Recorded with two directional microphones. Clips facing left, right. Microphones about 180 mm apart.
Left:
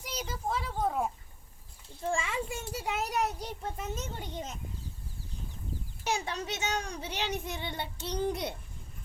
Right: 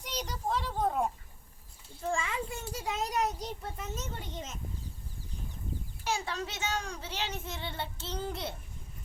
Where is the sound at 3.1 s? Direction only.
10° left (ahead or behind).